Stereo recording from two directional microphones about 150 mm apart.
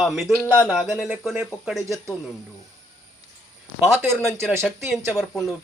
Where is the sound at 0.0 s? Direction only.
Centre (ahead or behind).